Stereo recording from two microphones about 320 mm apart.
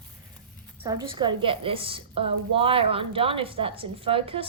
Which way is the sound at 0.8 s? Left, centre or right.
Centre.